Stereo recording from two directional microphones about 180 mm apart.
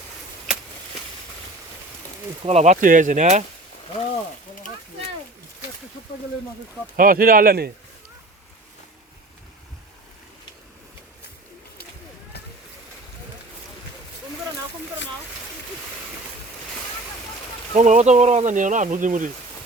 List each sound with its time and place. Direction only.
2.5 s speech: 40° right (ahead or behind)
6.9 s speech: 50° right (ahead or behind)
17.7 s speech: 40° right (ahead or behind)